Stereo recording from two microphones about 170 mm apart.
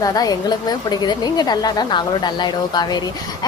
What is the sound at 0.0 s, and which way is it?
A woman's voice, 20° left (ahead or behind).